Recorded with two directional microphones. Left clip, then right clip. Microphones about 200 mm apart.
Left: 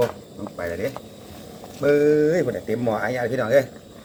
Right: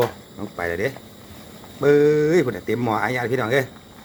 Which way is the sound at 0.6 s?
40° right (ahead or behind).